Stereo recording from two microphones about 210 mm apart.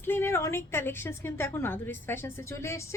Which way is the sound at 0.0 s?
10° left (ahead or behind).